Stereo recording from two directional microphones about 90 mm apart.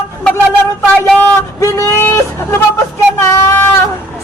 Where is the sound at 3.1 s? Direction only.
30° left (ahead or behind).